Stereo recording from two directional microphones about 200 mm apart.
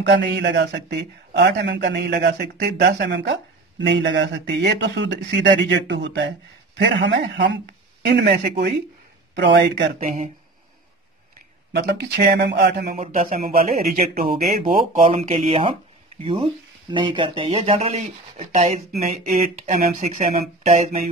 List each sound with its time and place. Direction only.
0.1 s speech: 60° right (ahead or behind)
11.7 s speech: 55° right (ahead or behind)
12.9 s speech: 35° right (ahead or behind)
14.3 s speech: 25° right (ahead or behind)